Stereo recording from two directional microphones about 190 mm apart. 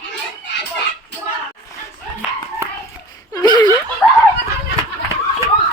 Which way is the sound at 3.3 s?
20° left (ahead or behind).